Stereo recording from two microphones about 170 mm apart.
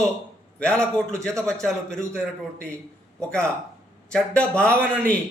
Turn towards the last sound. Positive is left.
turn(degrees=5)  # may be behind; listen again after turning